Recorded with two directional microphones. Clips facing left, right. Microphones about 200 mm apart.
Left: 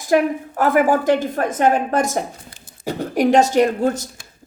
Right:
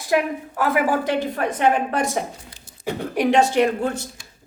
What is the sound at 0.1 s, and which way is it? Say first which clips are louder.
A woman's voice: left 4 dB; 45° left (ahead or behind).